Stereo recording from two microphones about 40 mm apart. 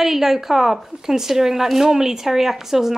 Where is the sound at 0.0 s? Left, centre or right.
Centre.